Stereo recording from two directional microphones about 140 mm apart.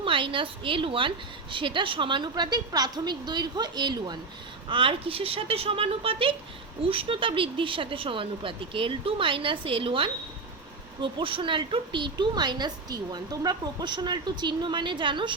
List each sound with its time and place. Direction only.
0.0 s a woman's voice: 35° right (ahead or behind)